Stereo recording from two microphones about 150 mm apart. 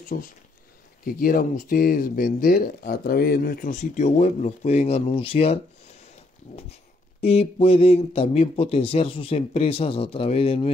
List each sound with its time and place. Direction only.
0.1 s speech: 75° left (ahead or behind)
3.9 s speech: 55° left (ahead or behind)